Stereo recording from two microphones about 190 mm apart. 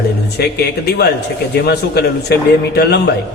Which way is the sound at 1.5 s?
60° left (ahead or behind).